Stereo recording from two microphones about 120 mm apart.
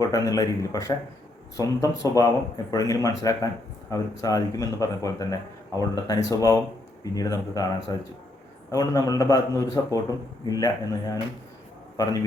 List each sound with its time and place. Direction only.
0.0 s speech: 30° left (ahead or behind)